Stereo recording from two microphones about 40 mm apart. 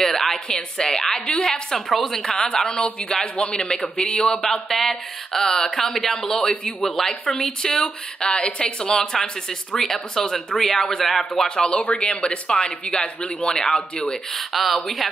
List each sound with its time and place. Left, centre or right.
0.0 s a sound: centre
0.5 s speech: centre
4.4 s speech: centre
11.4 s speech: left
13.6 s speech: centre
14.3 s speech: centre